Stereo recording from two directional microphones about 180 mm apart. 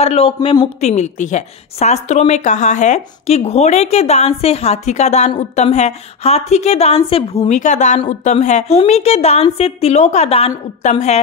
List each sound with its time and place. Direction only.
0.0 s a woman's voice: 35° left (ahead or behind)